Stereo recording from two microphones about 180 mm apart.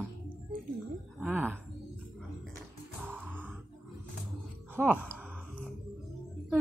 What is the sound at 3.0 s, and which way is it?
Grunt, 10° right (ahead or behind).